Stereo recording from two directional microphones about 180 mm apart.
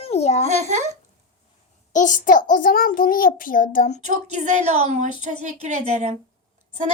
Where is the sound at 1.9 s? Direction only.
45° left (ahead or behind).